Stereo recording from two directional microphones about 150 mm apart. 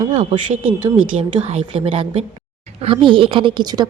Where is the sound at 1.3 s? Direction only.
45° right (ahead or behind).